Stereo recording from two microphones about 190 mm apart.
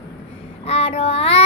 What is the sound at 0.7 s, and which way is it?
Child singing, 30° left (ahead or behind).